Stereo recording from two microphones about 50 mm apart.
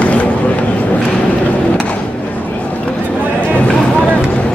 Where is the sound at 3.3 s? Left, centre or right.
Left.